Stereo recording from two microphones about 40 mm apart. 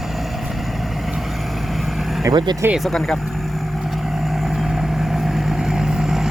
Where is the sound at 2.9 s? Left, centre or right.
Centre.